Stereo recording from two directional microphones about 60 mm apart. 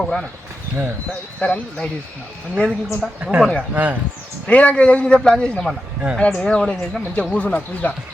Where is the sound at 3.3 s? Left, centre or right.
Centre.